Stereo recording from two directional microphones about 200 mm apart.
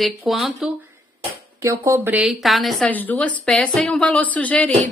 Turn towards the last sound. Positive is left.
turn(degrees=5)  # may be behind; listen again after turning